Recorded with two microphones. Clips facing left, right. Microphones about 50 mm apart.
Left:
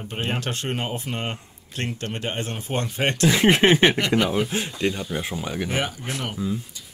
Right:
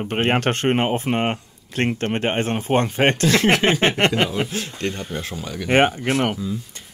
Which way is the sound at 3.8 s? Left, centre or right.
Right.